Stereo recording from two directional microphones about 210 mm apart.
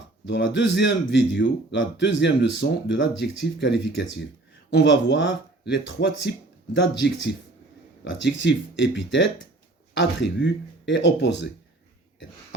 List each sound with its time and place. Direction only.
0.3 s a man's voice: 60° left (ahead or behind)